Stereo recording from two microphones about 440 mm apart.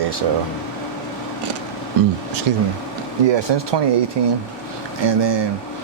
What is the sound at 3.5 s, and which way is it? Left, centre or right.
Speech, right.